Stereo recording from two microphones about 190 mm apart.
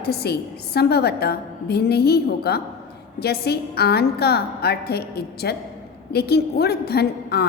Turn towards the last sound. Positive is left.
turn(degrees=55)  # may be behind; listen again after turning